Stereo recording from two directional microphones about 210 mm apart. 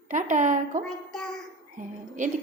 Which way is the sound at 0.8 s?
Centre (ahead or behind).